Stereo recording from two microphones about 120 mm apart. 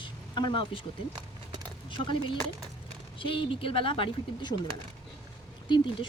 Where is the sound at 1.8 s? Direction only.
45° left (ahead or behind).